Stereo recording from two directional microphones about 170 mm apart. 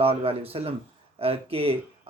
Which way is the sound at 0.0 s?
35° right (ahead or behind).